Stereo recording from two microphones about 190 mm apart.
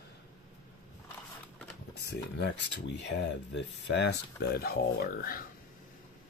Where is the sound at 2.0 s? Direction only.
65° left (ahead or behind).